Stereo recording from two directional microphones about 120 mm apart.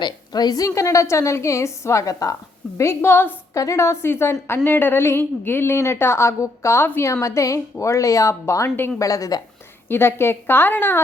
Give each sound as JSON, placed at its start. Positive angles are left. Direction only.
{"t": 0.0, "sound": "a woman's voice", "side_deg": 35}